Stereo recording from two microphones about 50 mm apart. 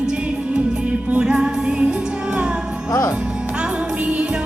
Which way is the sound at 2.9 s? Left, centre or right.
Left.